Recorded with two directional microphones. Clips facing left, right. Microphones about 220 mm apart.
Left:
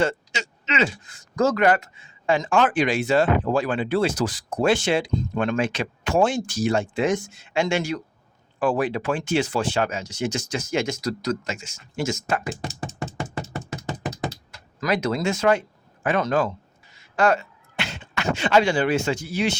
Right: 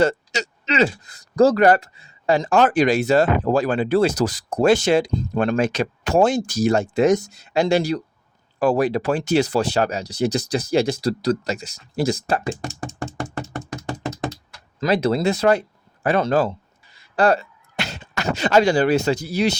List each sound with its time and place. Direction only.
0.0 s speech: 40° right (ahead or behind)
13.8 s computer keyboard: 15° left (ahead or behind)
14.8 s speech: 30° right (ahead or behind)